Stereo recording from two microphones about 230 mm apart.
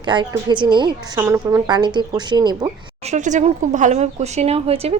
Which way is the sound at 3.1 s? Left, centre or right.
Right.